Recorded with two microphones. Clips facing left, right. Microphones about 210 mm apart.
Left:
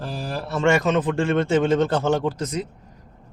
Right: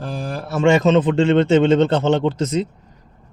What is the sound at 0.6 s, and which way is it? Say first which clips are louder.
A man's voice: right 5 dB; 20° right (ahead or behind).